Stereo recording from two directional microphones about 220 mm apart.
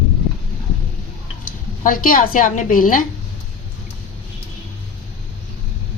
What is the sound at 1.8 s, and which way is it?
A woman's voice, 40° left (ahead or behind).